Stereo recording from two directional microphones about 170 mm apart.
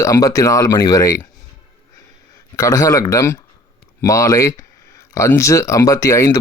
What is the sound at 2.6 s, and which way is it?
Speech, 20° left (ahead or behind).